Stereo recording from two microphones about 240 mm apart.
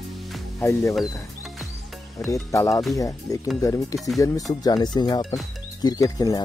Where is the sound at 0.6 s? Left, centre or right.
Centre.